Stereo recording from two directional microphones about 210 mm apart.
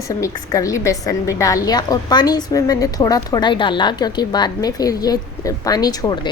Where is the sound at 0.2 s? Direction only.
15° left (ahead or behind).